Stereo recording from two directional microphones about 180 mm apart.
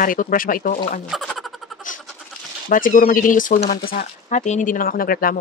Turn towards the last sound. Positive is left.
turn(degrees=50)  # may be behind; listen again after turning